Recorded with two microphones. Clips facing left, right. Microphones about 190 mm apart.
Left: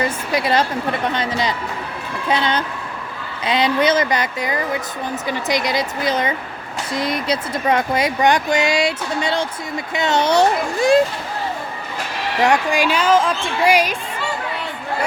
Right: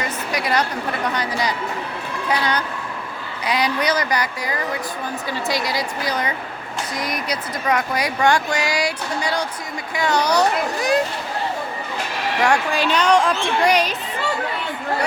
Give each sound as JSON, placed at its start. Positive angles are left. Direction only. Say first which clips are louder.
{"t": 0.3, "sound": "speech", "louder": "left 3 dB", "side_deg": 25}
{"t": 12.4, "sound": "a woman's voice", "louder": "left 3 dB", "side_deg": 15}